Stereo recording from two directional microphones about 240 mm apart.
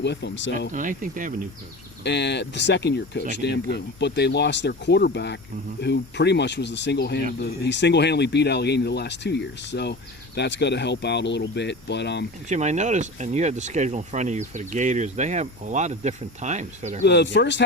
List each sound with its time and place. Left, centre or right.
0.0 s speech: left
0.7 s speech: right
2.0 s speech: left
12.5 s speech: right
17.1 s speech: left